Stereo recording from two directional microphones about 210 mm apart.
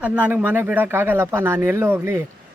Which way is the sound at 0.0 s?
10° right (ahead or behind).